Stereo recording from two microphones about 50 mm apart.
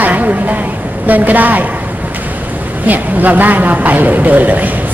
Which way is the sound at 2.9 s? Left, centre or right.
Right.